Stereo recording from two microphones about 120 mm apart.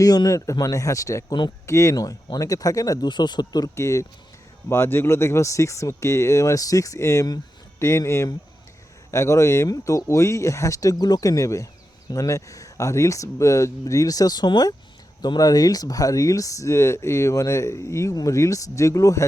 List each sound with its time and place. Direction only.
0.0 s speech: 30° left (ahead or behind)